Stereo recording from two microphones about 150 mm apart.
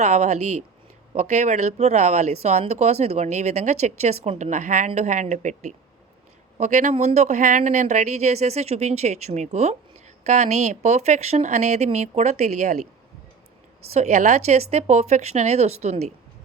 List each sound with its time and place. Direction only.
0.0 s speech: 50° right (ahead or behind)
13.9 s speech: 50° right (ahead or behind)